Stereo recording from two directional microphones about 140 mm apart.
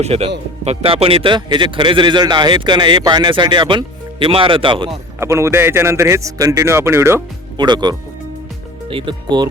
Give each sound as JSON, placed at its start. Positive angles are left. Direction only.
{"t": 0.0, "sound": "speech", "side_deg": -50}
{"t": 5.2, "sound": "a man's voice", "side_deg": -20}
{"t": 7.5, "sound": "speech", "side_deg": -30}